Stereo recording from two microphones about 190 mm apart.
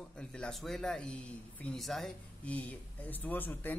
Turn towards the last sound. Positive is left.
turn(degrees=10)  # may be behind; listen again after turning